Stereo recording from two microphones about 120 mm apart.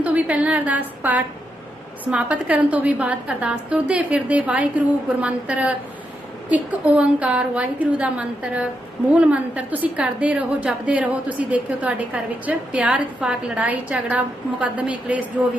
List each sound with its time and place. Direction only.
0.0 s a woman's voice: 10° right (ahead or behind)